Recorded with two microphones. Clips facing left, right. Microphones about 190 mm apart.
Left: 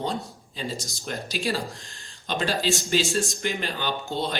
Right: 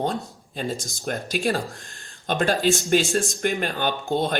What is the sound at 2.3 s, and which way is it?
Speech, 50° right (ahead or behind).